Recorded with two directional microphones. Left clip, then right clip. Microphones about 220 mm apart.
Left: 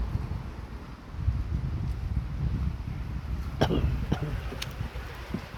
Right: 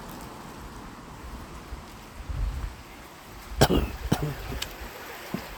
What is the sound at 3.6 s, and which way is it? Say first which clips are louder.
Cough: right 5 dB; 30° right (ahead or behind).